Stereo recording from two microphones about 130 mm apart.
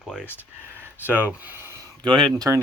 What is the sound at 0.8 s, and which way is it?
Speech, 15° right (ahead or behind).